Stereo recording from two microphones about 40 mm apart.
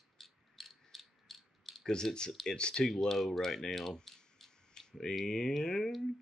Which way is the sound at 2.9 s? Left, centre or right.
Centre.